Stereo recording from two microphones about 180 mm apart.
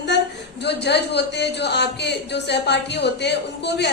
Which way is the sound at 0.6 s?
70° left (ahead or behind).